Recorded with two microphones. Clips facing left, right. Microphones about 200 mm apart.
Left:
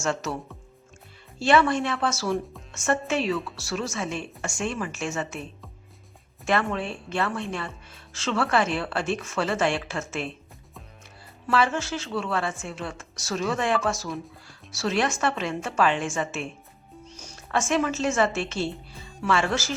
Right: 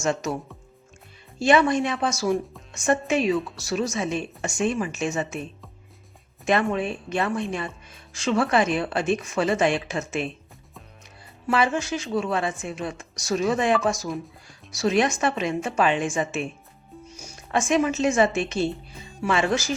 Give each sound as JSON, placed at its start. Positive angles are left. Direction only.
{"t": 0.0, "sound": "a woman's voice", "side_deg": -15}
{"t": 1.4, "sound": "a woman's voice", "side_deg": -15}
{"t": 6.4, "sound": "a woman's voice", "side_deg": -20}
{"t": 11.4, "sound": "a woman's voice", "side_deg": -15}